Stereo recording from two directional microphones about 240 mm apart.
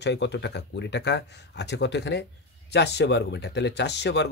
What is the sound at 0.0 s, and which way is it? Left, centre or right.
Speech, left.